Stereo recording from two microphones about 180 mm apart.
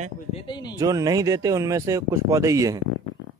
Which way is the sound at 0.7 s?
20° right (ahead or behind).